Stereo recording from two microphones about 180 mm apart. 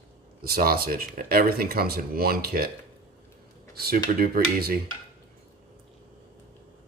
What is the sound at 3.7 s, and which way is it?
Speech, 55° right (ahead or behind).